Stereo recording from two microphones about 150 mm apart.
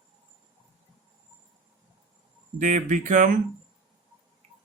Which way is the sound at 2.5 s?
55° right (ahead or behind).